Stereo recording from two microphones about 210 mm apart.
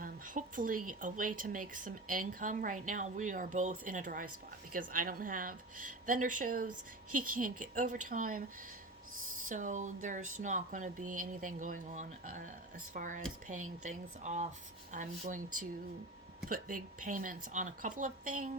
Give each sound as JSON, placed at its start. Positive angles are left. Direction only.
{"t": 0.0, "sound": "a sound", "side_deg": -40}
{"t": 0.9, "sound": "speech", "side_deg": -40}
{"t": 9.5, "sound": "speech", "side_deg": -35}